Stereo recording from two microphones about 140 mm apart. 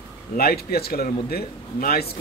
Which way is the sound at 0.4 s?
90° left.